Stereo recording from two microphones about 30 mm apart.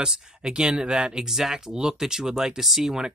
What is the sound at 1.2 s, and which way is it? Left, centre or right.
Speech, centre.